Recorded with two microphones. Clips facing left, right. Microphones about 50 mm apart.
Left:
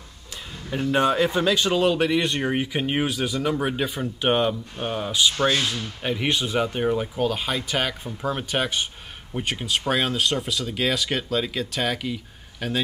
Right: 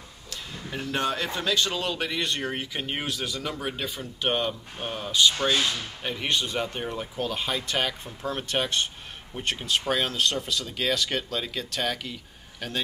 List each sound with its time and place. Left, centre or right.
0.7 s speech: centre